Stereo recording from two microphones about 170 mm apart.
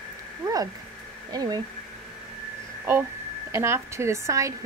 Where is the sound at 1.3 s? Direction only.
25° right (ahead or behind).